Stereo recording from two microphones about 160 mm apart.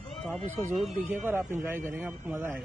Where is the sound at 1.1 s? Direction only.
15° right (ahead or behind).